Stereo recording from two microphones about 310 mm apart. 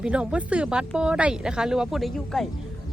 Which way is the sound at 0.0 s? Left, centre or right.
Centre.